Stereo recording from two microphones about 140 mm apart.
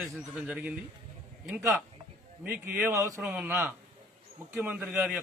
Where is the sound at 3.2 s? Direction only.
5° right (ahead or behind).